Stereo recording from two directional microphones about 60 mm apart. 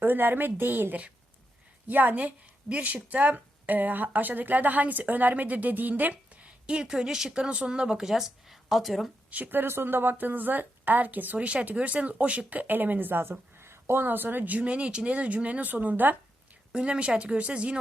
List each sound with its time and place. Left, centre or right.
0.0 s a woman's voice: right; by 9.1 s centre
9.3 s speech: right
13.6 s speech: right
16.7 s speech: centre